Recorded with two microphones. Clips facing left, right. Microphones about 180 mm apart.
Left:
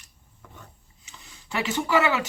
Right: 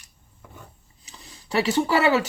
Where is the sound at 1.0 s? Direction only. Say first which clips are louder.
Right 6 dB; 35° right (ahead or behind).